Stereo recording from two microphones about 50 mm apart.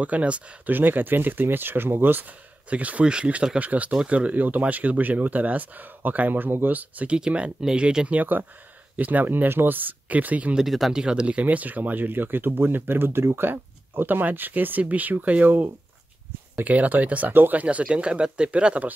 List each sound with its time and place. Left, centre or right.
0.0 s speech: right
0.7 s speech: right
2.7 s speech: right
6.8 s speech: right
7.2 s speech: right
8.2 s speech: right
10.9 s speech: centre
11.4 s speech: right
13.5 s speech: right
15.4 s speech: right
16.6 s speech: right